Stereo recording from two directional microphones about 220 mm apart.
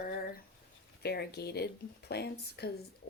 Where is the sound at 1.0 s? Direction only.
45° left (ahead or behind).